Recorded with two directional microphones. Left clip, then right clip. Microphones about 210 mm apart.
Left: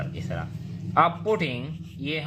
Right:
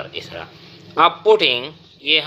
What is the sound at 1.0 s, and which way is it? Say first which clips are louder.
Speech: right 9 dB; 30° right (ahead or behind).